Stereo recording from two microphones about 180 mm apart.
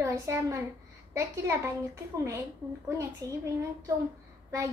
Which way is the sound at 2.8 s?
15° right (ahead or behind).